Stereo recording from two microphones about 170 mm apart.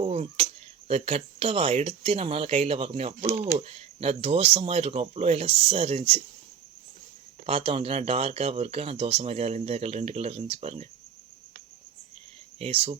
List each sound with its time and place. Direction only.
0.0 s speech: 40° right (ahead or behind)
7.4 s speech: 35° right (ahead or behind)
12.5 s speech: 35° right (ahead or behind)